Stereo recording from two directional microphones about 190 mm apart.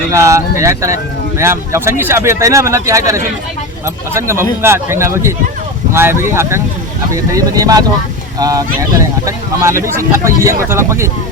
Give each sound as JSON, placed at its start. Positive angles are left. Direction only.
{"t": 0.1, "sound": "speech", "side_deg": -15}